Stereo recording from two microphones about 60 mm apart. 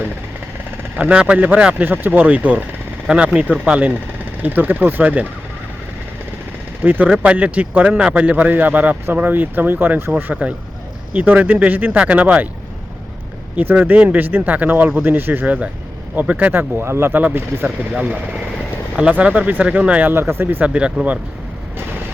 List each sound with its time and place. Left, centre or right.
1.1 s speech: centre
6.8 s speech: right
13.6 s speech: right
17.2 s speech: right
17.9 s speech: right
20.1 s speech: right
20.7 s speech: centre